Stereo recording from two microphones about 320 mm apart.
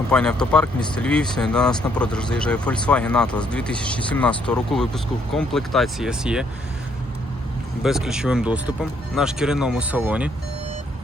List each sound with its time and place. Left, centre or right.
0.1 s speech: centre
7.8 s speech: centre